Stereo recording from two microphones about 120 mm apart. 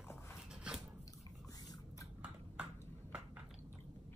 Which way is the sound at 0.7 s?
10° right (ahead or behind).